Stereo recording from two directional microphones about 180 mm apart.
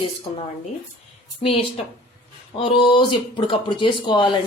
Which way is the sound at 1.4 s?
30° left (ahead or behind).